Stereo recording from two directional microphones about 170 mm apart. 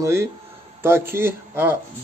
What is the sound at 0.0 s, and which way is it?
Speech, 15° right (ahead or behind).